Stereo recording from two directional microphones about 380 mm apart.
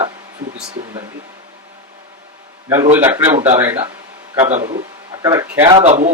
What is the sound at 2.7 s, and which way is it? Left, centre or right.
Speech, centre.